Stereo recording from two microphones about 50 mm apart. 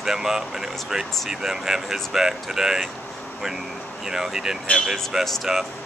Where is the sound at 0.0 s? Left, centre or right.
Centre.